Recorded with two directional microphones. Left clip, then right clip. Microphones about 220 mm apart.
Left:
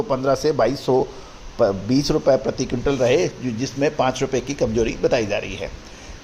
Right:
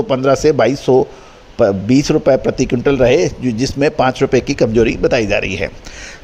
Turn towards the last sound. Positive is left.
turn(degrees=-35)  # may be behind; listen again after turning